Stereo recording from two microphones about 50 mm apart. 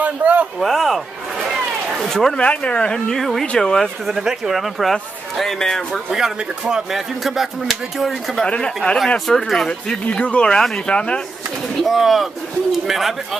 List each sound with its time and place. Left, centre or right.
0.0 s a sound: right
0.6 s speech: centre
1.4 s a sound: centre
2.0 s speech: centre
2.3 s speech: left
3.1 s speech: centre
4.2 s speech: centre
4.9 s speech: centre
6.1 s speech: centre
8.5 s speech: left
9.3 s speech: centre
10.0 s speech: left
11.8 s speech: centre